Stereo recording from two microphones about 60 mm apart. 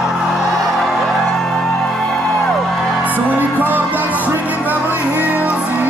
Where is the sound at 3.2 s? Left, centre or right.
Right.